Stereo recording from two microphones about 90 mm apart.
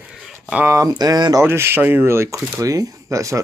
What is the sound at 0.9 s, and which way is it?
Speech, 50° right (ahead or behind).